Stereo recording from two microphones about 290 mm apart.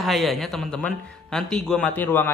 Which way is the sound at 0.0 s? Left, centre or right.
Centre.